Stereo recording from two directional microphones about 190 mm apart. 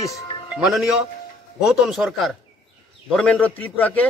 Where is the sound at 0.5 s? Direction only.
5° right (ahead or behind).